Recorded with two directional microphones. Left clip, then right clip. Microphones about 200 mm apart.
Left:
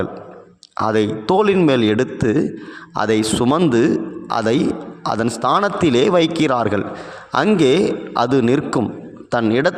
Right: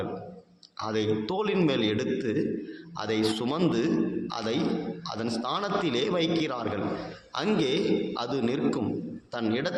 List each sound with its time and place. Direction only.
0.8 s a man's voice: 55° left (ahead or behind)